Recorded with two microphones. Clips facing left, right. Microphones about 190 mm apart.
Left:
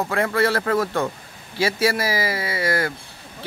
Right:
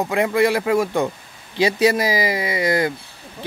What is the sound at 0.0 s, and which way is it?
Speech, 15° right (ahead or behind).